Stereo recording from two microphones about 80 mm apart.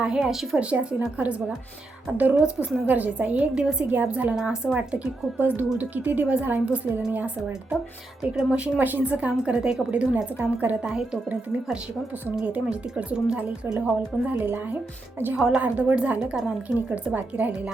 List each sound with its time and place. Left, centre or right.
0.0 s a woman's voice: centre
3.8 s a woman's voice: right
5.4 s a woman's voice: right
8.2 s a woman's voice: centre
9.4 s a woman's voice: centre
10.8 s a woman's voice: centre
12.5 s a woman's voice: centre
14.3 s a woman's voice: centre
15.4 s a woman's voice: centre
15.6 s a woman's voice: centre